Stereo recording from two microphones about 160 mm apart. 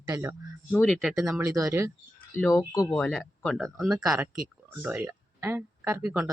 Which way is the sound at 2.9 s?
5° left (ahead or behind).